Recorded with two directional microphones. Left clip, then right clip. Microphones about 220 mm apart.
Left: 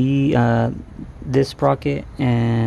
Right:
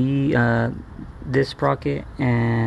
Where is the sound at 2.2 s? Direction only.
5° left (ahead or behind).